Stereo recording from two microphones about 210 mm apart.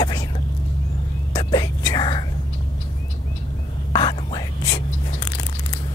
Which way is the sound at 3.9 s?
20° left (ahead or behind).